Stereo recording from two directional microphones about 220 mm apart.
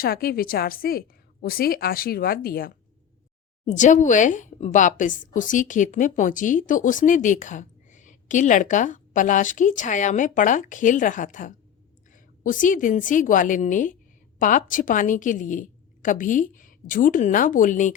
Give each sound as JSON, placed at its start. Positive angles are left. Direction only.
{"t": 0.0, "sound": "a woman's voice", "side_deg": 40}
{"t": 3.8, "sound": "a woman's voice", "side_deg": 35}